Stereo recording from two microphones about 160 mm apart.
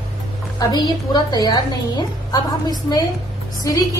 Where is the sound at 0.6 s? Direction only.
25° left (ahead or behind).